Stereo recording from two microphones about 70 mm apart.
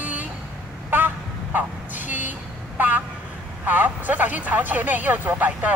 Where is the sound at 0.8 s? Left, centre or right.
Right.